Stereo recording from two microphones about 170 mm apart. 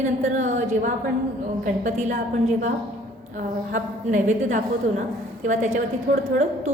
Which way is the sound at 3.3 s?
50° right (ahead or behind).